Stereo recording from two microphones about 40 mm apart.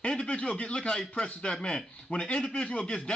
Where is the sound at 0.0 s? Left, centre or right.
Left.